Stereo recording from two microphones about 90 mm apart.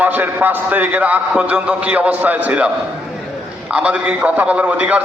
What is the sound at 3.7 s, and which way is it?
A man's voice, 15° right (ahead or behind).